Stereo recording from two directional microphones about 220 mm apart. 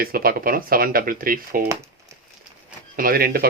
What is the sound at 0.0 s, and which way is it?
Speech, 45° right (ahead or behind).